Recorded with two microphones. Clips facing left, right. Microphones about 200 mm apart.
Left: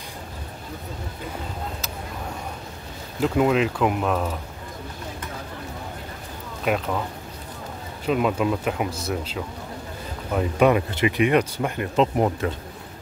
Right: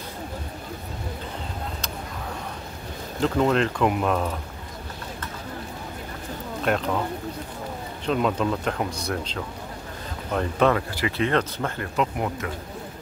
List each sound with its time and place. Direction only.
3.2 s speech: 5° left (ahead or behind)
6.7 s speech: 5° left (ahead or behind)
8.0 s speech: 5° left (ahead or behind)
12.0 s speech: 30° left (ahead or behind)